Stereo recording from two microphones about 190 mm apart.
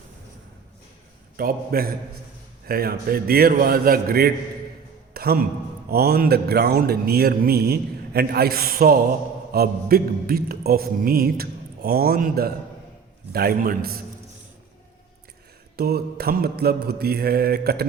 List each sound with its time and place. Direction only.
1.4 s speech: 50° right (ahead or behind)
5.1 s music: 55° right (ahead or behind)
5.9 s speech: 55° right (ahead or behind)
15.7 s mantra: 55° right (ahead or behind)